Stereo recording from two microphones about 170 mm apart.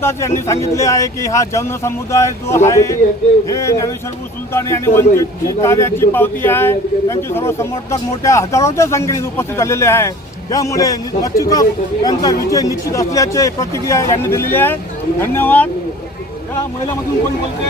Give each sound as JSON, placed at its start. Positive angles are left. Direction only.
{"t": 0.0, "sound": "a man's voice", "side_deg": 15}